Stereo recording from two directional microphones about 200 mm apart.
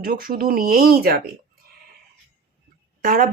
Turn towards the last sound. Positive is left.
turn(degrees=-45)  # may be behind; listen again after turning